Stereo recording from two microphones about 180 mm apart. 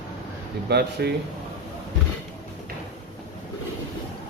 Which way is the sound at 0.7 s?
65° right (ahead or behind).